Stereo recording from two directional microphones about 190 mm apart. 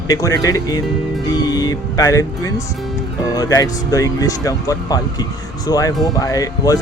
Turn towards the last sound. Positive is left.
turn(degrees=20)  # may be behind; listen again after turning